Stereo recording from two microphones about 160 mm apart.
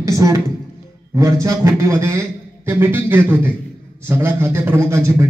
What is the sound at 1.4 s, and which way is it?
A man's voice, 15° right (ahead or behind).